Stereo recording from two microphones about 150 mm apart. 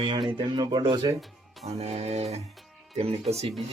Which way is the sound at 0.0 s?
35° right (ahead or behind).